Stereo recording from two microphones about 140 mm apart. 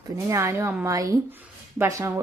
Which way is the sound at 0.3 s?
20° right (ahead or behind).